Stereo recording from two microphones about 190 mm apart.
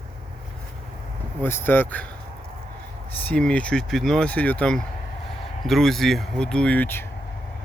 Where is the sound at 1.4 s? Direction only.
10° left (ahead or behind).